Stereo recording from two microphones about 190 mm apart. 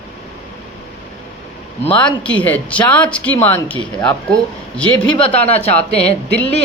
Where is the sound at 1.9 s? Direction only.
5° left (ahead or behind).